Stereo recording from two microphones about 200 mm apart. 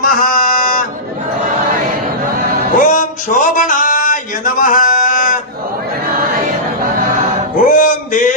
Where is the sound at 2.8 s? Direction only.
40° left (ahead or behind).